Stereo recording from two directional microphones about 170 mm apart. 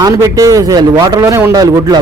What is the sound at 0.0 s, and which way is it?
Speech, 20° right (ahead or behind).